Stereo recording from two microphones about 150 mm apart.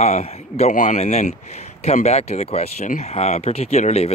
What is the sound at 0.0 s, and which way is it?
A man's voice, 45° left (ahead or behind).